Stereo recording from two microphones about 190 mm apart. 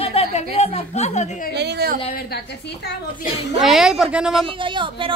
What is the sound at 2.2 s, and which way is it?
Speech, 55° left (ahead or behind).